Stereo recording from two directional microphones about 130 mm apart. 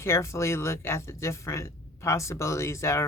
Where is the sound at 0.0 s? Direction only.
20° left (ahead or behind).